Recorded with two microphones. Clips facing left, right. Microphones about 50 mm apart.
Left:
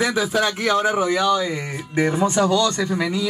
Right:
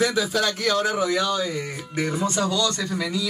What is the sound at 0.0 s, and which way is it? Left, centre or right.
Speech, left.